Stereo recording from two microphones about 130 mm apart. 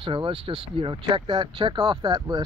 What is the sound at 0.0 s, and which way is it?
Speech, 45° right (ahead or behind).